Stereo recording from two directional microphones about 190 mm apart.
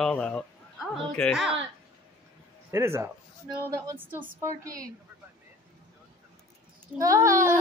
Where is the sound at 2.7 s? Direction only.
15° right (ahead or behind).